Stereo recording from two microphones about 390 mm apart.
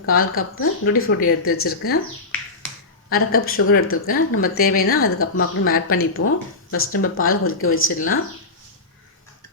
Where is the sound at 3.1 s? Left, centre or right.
Left.